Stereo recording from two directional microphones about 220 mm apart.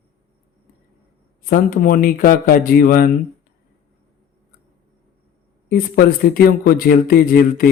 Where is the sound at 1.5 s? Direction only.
40° left (ahead or behind).